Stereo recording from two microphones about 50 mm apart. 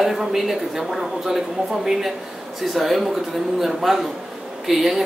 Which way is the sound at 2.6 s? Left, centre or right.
Centre.